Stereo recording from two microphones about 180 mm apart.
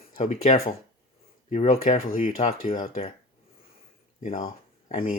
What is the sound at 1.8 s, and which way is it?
Speech, 50° left (ahead or behind).